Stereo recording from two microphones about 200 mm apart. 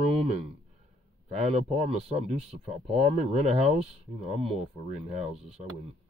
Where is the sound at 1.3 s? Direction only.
35° right (ahead or behind).